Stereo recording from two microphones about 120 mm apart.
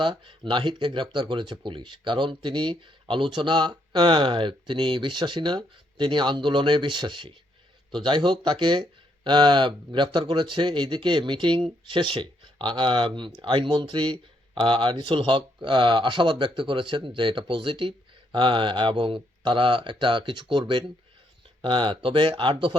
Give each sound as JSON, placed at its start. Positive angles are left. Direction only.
{"t": 0.0, "sound": "speech", "side_deg": -40}